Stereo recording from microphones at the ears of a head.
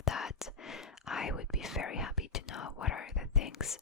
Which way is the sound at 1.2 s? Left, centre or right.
Left.